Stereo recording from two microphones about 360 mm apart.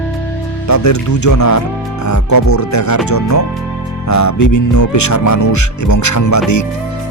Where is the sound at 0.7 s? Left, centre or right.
Left.